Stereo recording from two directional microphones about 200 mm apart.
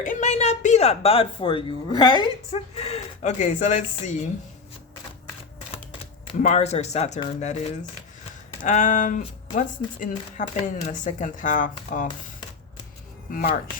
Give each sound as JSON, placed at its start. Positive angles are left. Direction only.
{"t": 0.0, "sound": "speech", "side_deg": 40}
{"t": 2.5, "sound": "speech", "side_deg": 30}
{"t": 6.4, "sound": "speech", "side_deg": 35}